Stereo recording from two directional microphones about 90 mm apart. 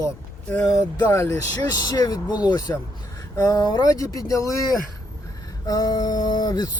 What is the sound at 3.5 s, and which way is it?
Speech, 50° left (ahead or behind).